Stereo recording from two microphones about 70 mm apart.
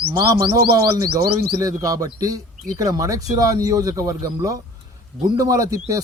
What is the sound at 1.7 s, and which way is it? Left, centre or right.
Speech, right.